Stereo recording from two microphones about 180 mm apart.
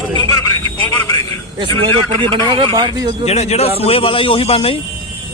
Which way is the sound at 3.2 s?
35° left (ahead or behind).